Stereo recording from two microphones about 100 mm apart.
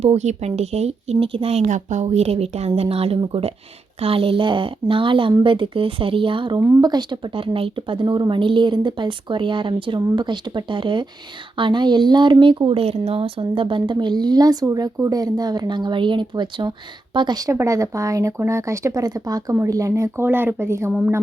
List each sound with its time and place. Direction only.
0.0 s a woman's voice: 90° right
3.2 s speech: 65° right (ahead or behind)
6.8 s speech: 45° right (ahead or behind)
7.3 s speech: 65° right (ahead or behind)
8.0 s speech: 45° right (ahead or behind); by 20.9 s 25° right (ahead or behind)